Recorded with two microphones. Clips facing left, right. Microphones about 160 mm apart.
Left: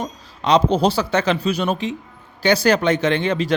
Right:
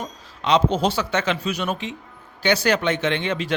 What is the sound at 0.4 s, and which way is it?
Speech, 35° left (ahead or behind).